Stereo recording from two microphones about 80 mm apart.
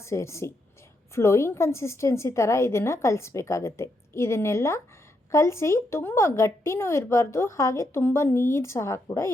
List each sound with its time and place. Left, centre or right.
0.0 s a woman's voice: left